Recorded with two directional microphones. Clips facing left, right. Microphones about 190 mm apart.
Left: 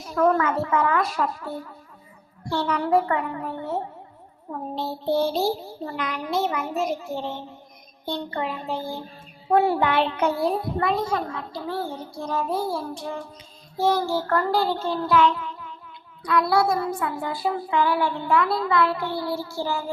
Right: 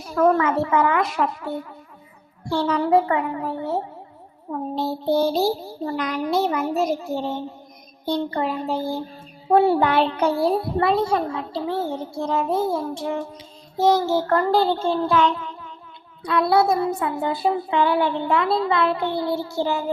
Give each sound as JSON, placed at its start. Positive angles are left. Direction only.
{"t": 0.3, "sound": "a child's voice", "side_deg": -25}
{"t": 4.7, "sound": "a child's voice", "side_deg": -40}